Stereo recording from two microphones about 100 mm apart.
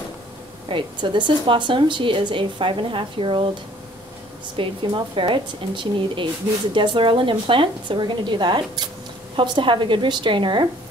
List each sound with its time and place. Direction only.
0.7 s a woman's voice: 55° right (ahead or behind)
4.6 s a woman's voice: 55° right (ahead or behind)